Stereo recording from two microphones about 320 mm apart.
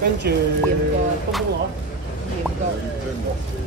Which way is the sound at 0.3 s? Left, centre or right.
Right.